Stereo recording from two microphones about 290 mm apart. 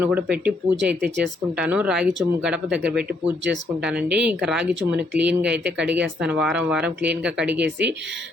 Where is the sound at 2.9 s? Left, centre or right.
Right.